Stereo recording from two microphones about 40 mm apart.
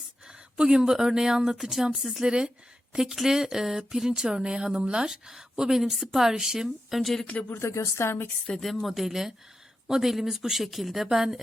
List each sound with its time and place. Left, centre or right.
0.3 s a sound: centre
0.9 s speech: centre
2.2 s a woman's voice: centre
7.0 s speech: centre
7.8 s a woman's voice: left
8.6 s speech: centre